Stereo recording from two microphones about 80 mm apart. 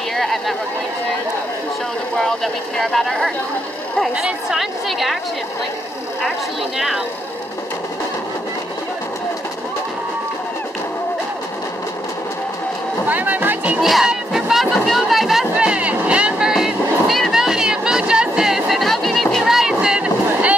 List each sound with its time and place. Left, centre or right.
0.1 s a sound: centre
2.1 s speech: centre
13.1 s speech: right
13.7 s speech: centre
15.5 s vehicle: centre
19.3 s boat: centre